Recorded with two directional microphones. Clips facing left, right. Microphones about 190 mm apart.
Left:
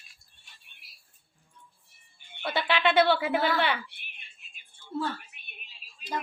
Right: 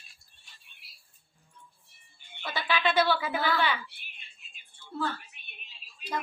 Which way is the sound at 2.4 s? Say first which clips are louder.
Left 3 dB; 60° left (ahead or behind).